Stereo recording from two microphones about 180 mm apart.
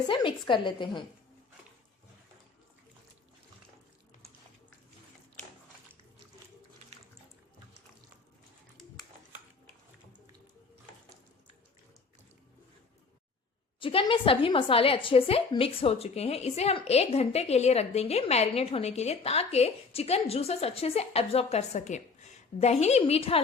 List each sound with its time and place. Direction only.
0.1 s a woman's voice: 25° left (ahead or behind)
13.7 s a woman's voice: 30° left (ahead or behind)